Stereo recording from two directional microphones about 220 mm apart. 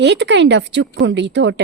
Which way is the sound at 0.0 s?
50° right (ahead or behind).